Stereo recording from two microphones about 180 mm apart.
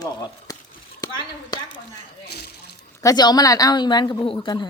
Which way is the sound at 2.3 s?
60° left (ahead or behind).